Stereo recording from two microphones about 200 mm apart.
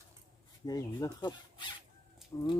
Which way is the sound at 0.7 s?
20° left (ahead or behind).